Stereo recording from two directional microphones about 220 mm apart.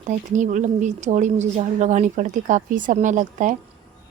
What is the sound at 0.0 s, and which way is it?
A woman's voice, 35° right (ahead or behind).